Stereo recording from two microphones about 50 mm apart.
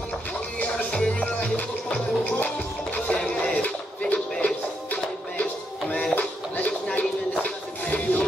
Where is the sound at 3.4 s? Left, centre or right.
Left.